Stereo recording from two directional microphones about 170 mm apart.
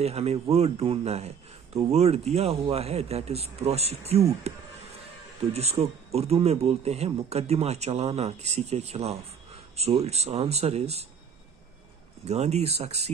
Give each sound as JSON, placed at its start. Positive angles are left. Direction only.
{"t": 0.0, "sound": "speech", "side_deg": -40}
{"t": 12.3, "sound": "speech", "side_deg": -40}